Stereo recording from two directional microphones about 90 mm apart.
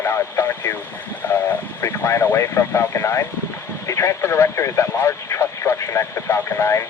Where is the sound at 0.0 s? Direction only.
30° left (ahead or behind).